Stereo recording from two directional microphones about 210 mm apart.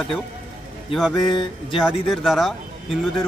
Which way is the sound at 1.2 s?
20° left (ahead or behind).